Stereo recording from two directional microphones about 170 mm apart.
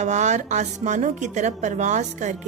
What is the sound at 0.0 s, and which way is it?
Music, 45° right (ahead or behind).